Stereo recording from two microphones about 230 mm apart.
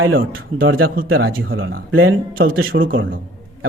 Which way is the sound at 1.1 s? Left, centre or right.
Right.